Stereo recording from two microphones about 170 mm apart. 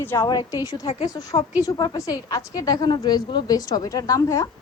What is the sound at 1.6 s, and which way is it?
A woman's voice, 25° left (ahead or behind).